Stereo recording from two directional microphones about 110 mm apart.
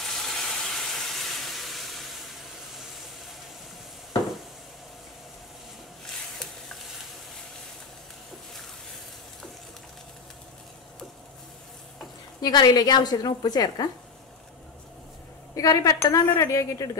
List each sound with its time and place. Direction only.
0.1 s a sound: 5° left (ahead or behind)
12.4 s a woman's voice: 40° left (ahead or behind)
15.5 s a woman's voice: 30° left (ahead or behind)